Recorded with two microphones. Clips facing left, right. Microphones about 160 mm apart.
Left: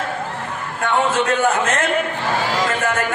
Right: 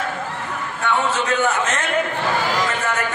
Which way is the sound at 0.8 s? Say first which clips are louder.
Left 3 dB; 55° left (ahead or behind).